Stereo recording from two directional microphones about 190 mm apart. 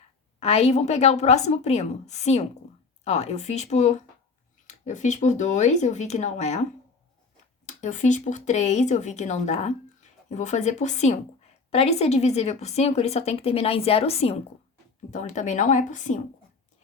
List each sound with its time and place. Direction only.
0.3 s speech: 35° left (ahead or behind)
7.7 s speech: 40° left (ahead or behind)